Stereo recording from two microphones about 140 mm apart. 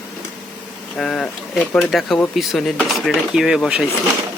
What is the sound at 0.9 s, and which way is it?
Speech, 5° left (ahead or behind).